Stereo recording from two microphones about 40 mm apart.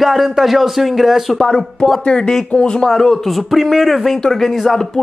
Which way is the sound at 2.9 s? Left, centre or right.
Centre.